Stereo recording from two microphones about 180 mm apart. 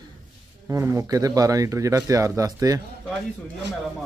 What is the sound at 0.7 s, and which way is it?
Speech, 15° right (ahead or behind).